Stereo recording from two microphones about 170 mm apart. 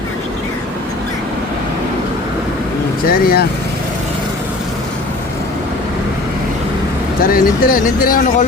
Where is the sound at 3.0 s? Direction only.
60° left (ahead or behind).